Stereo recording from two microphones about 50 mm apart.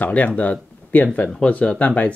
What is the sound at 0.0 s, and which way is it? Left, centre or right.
Speech, left.